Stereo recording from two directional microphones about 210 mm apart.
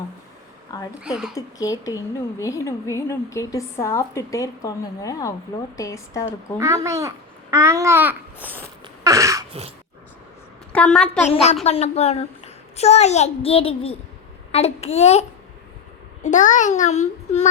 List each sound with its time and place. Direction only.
1.0 s speech: 5° right (ahead or behind)
1.4 s a woman's voice: 15° left (ahead or behind)
6.6 s babbling: 15° right (ahead or behind)
9.0 s a sound: 15° right (ahead or behind)
9.5 s throat clearing: 30° right (ahead or behind)
10.7 s a woman's voice: 5° left (ahead or behind)
11.3 s a woman's voice: 30° left (ahead or behind)